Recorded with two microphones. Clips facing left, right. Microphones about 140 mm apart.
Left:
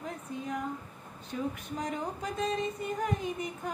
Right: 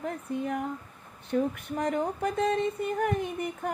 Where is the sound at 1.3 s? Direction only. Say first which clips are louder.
Right 7 dB; 60° right (ahead or behind).